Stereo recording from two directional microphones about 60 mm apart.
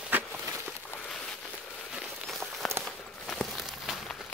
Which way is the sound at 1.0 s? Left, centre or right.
Centre.